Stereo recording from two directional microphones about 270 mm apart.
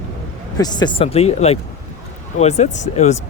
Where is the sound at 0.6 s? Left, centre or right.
Centre.